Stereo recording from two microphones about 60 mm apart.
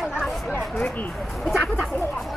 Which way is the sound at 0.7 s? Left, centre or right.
Left.